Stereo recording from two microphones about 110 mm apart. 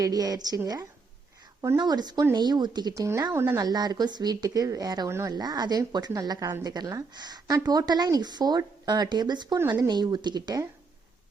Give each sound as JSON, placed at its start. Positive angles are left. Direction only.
{"t": 0.0, "sound": "speech", "side_deg": -35}
{"t": 1.8, "sound": "speech", "side_deg": -40}
{"t": 3.6, "sound": "speech", "side_deg": -40}